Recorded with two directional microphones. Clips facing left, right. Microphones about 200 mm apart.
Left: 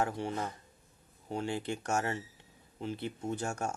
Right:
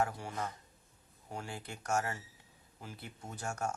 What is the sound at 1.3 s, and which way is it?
Speech, 25° left (ahead or behind).